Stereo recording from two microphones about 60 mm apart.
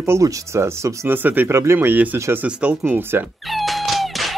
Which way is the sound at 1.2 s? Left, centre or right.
Right.